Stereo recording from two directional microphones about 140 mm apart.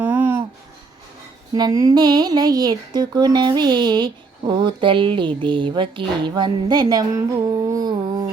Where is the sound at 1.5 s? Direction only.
25° right (ahead or behind).